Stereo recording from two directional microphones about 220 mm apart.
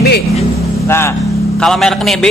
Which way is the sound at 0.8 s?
10° left (ahead or behind).